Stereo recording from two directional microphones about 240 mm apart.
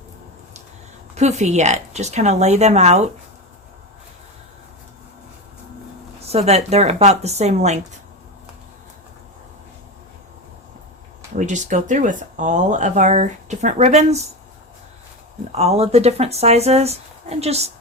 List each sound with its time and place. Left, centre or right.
1.1 s speech: right
6.2 s speech: right
11.3 s speech: right
15.5 s speech: right